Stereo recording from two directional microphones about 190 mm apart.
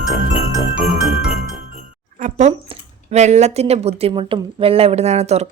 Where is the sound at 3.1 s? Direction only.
35° right (ahead or behind).